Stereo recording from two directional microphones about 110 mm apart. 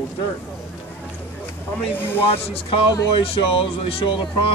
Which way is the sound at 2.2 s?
60° left (ahead or behind).